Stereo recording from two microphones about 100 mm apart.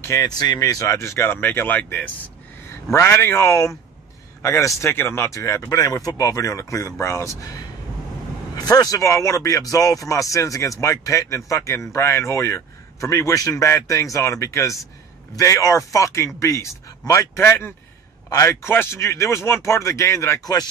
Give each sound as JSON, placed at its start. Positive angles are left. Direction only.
{"t": 0.0, "sound": "a man's voice", "side_deg": 30}